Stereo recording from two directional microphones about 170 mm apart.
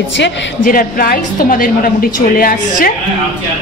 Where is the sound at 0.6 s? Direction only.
55° left (ahead or behind).